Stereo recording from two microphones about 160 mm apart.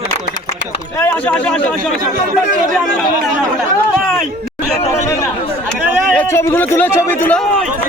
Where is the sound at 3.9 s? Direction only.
Centre (ahead or behind).